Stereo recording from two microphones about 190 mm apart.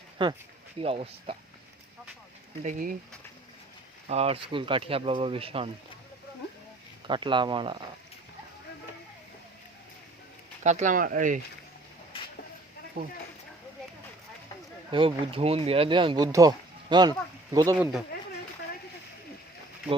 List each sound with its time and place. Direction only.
0.2 s speech: 25° right (ahead or behind)
2.6 s speech: 45° right (ahead or behind)
4.0 s speech: 35° right (ahead or behind)
7.1 s speech: 25° right (ahead or behind)
10.6 s speech: 40° right (ahead or behind)
13.0 s speech: 55° right (ahead or behind)
14.8 s speech: 25° right (ahead or behind)
17.7 s speech: 5° right (ahead or behind)